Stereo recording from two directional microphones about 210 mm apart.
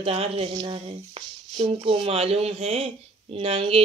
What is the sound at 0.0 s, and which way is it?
Speech, 25° right (ahead or behind).